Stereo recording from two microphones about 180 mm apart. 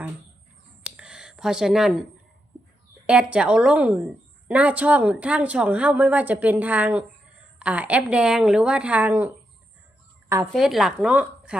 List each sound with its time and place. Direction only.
0.9 s a sound: 5° right (ahead or behind)
3.1 s a woman's voice: 5° right (ahead or behind)
10.5 s speech: centre (ahead or behind)